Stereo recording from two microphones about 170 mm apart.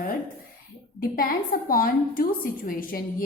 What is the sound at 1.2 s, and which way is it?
A woman's voice, 60° left (ahead or behind).